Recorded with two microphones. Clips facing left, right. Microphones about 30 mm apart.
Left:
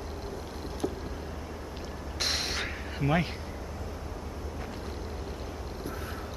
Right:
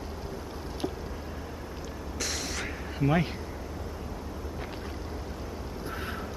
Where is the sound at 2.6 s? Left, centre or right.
Centre.